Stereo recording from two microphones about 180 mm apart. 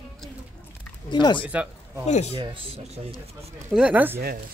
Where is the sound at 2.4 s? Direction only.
30° right (ahead or behind).